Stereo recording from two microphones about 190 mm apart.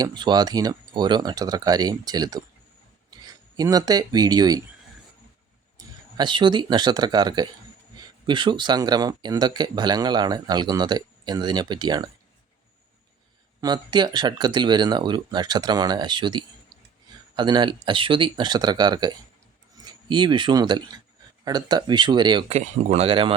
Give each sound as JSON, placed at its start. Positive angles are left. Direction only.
{"t": 0.0, "sound": "speech", "side_deg": -20}
{"t": 3.6, "sound": "speech", "side_deg": -20}
{"t": 5.7, "sound": "speech", "side_deg": -20}
{"t": 13.6, "sound": "speech", "side_deg": -20}
{"t": 22.5, "sound": "speech", "side_deg": -35}